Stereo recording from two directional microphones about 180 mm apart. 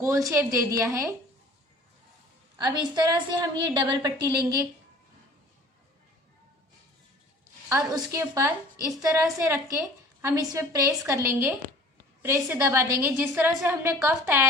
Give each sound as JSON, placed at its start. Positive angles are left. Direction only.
{"t": 0.0, "sound": "a woman's voice", "side_deg": -15}
{"t": 2.6, "sound": "a woman's voice", "side_deg": -25}
{"t": 7.7, "sound": "a woman's voice", "side_deg": -15}